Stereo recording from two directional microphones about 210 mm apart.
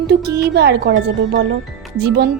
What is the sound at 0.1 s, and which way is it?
Speech, 50° right (ahead or behind).